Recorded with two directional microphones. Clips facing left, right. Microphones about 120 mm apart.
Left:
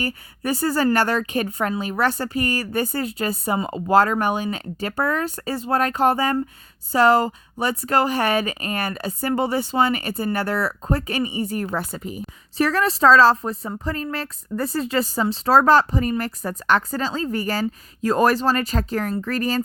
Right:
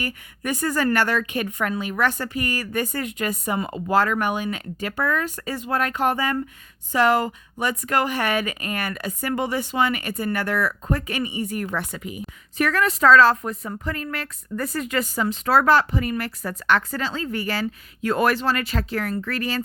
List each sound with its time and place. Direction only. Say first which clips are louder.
0.0 s a woman's voice: left 3 dB; 35° left (ahead or behind)